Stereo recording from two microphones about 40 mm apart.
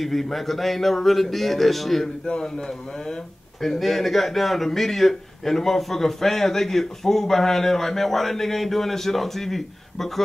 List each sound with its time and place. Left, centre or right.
0.0 s a man's voice: centre
2.2 s a man's voice: centre
3.6 s a man's voice: centre